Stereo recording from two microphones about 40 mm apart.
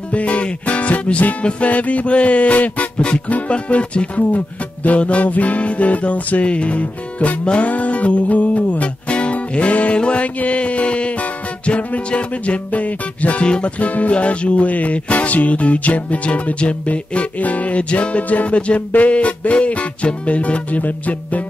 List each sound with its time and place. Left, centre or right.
0.1 s music: left